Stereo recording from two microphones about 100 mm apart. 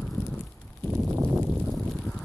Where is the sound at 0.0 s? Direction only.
10° left (ahead or behind).